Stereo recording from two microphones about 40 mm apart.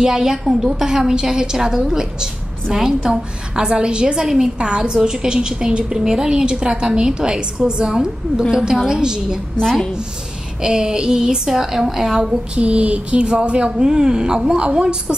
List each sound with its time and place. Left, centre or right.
0.0 s a woman's voice: centre
9.6 s a woman's voice: centre
10.6 s a woman's voice: right
12.5 s speech: right